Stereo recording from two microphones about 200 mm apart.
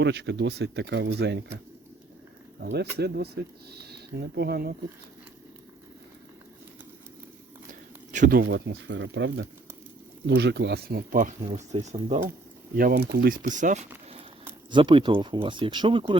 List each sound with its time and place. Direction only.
0.0 s speech: 60° right (ahead or behind)
2.7 s speech: 55° right (ahead or behind)
7.7 s speech: 40° right (ahead or behind)